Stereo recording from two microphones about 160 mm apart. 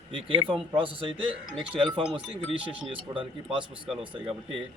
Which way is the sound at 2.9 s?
30° right (ahead or behind).